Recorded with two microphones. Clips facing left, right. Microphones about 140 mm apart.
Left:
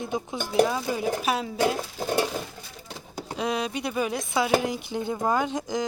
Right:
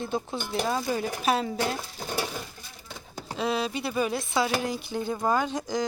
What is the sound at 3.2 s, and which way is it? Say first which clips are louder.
Speech: even; 10° left (ahead or behind).